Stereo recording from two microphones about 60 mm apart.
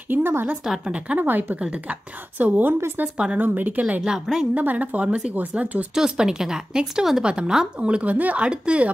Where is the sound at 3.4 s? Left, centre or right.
Right.